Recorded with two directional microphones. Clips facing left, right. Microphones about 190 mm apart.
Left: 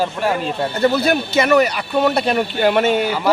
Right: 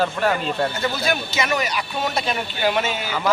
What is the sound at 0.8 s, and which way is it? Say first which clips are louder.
Speech: left 8 dB; 60° left (ahead or behind).